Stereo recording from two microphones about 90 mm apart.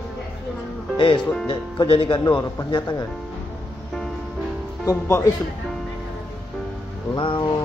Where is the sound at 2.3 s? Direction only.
60° left (ahead or behind).